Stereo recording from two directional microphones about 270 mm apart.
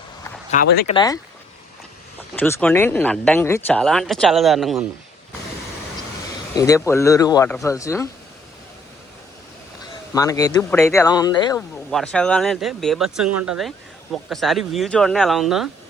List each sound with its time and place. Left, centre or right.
0.5 s speech: left
0.9 s speech: centre
2.3 s speech: centre
6.6 s speech: centre
10.2 s speech: centre
11.9 s speech: centre